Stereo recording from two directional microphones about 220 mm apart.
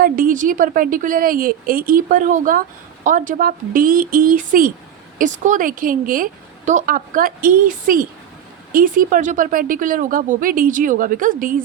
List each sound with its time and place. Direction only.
0.0 s a woman's voice: 40° right (ahead or behind)